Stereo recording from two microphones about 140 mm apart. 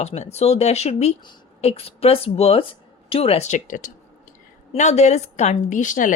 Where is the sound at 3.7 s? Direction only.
70° left (ahead or behind).